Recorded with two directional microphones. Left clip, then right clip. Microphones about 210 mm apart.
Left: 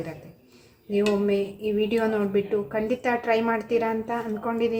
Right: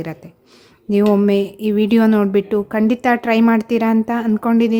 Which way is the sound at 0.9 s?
50° right (ahead or behind).